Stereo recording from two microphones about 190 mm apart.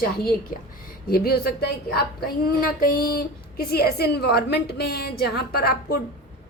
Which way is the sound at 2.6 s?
50° left (ahead or behind).